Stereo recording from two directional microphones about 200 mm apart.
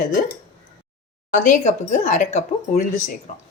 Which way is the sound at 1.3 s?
40° left (ahead or behind).